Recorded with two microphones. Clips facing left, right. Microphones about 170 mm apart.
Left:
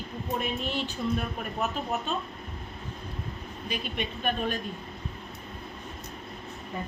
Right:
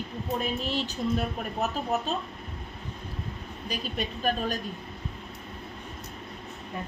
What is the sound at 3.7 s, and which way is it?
Speech, 40° right (ahead or behind).